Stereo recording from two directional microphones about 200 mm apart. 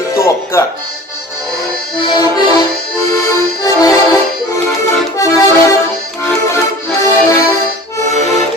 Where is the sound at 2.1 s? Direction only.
20° left (ahead or behind).